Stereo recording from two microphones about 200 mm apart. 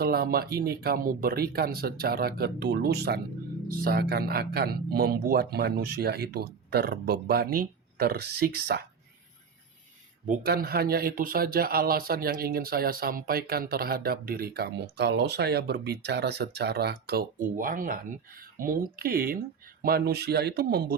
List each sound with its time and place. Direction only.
0.0 s speech: 50° right (ahead or behind)
10.2 s speech: 50° right (ahead or behind)